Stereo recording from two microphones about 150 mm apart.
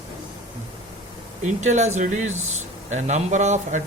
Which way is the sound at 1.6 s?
50° right (ahead or behind).